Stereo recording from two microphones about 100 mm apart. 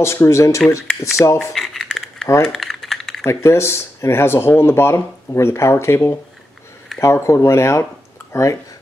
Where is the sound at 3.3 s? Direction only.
25° left (ahead or behind).